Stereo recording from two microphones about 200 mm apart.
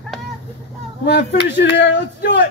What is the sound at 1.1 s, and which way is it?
Speech, 55° left (ahead or behind).